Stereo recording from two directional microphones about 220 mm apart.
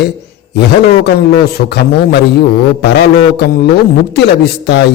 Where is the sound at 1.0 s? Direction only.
45° left (ahead or behind).